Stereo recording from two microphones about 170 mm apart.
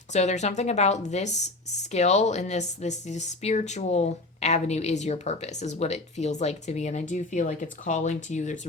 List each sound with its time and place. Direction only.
0.1 s speech: 40° left (ahead or behind)